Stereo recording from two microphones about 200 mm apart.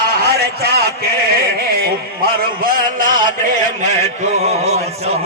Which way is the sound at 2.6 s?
45° right (ahead or behind).